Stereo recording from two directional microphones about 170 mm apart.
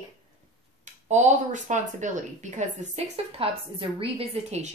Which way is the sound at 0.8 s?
45° right (ahead or behind).